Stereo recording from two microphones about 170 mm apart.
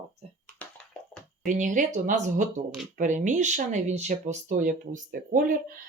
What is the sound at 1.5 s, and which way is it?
Speech, 45° right (ahead or behind).